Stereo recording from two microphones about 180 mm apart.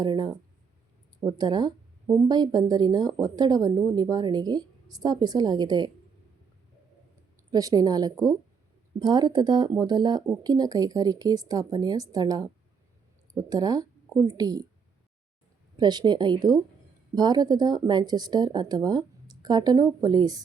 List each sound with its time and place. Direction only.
0.0 s speech: 25° right (ahead or behind)
7.5 s speech: 20° right (ahead or behind)
15.8 s speech: 25° right (ahead or behind)